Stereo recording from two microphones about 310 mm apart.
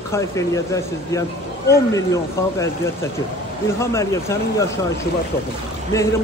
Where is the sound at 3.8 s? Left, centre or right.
Centre.